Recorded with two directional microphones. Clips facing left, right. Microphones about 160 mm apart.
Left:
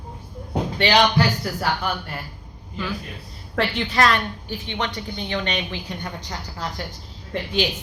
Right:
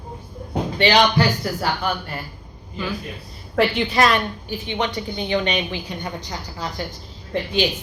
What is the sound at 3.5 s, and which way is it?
A woman's voice, 10° right (ahead or behind).